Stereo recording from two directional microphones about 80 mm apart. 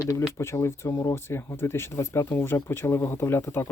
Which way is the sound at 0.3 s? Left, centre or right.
Left.